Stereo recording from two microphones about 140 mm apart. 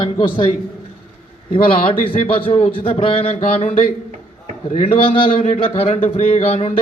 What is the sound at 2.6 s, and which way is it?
Speech, 45° left (ahead or behind).